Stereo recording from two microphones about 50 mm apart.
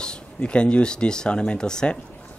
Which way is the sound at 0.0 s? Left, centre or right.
Centre.